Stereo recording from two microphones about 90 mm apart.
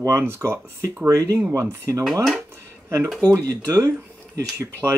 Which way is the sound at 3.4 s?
45° right (ahead or behind).